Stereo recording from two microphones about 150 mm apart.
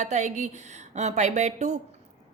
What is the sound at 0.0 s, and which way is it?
A woman's voice, 50° right (ahead or behind).